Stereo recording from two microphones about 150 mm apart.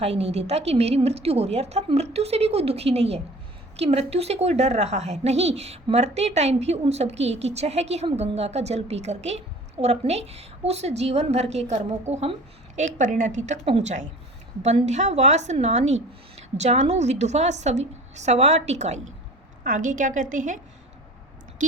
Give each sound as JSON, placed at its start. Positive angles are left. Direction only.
{"t": 0.0, "sound": "a woman's voice", "side_deg": -45}